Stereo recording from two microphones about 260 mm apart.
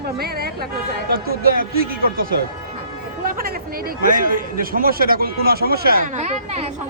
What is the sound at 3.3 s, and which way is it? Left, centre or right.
A man's voice, right.